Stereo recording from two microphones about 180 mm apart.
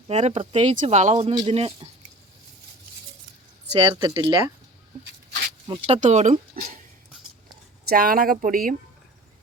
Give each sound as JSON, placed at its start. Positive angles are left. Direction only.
{"t": 0.1, "sound": "speech", "side_deg": -40}
{"t": 3.8, "sound": "speech", "side_deg": -25}
{"t": 5.6, "sound": "speech", "side_deg": -30}
{"t": 7.9, "sound": "speech", "side_deg": -55}